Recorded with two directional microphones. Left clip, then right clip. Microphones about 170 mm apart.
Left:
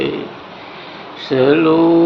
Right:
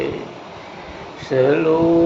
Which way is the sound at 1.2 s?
50° left (ahead or behind).